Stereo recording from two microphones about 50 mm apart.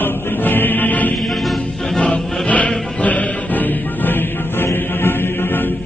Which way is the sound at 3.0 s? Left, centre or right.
Left.